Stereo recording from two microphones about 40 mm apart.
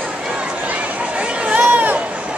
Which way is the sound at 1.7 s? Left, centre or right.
Right.